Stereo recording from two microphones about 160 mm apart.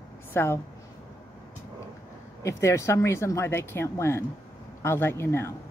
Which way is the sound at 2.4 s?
20° left (ahead or behind).